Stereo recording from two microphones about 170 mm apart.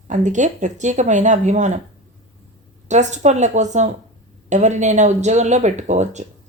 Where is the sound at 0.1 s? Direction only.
45° right (ahead or behind).